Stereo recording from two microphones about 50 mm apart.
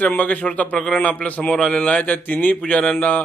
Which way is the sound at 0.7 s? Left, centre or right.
Centre.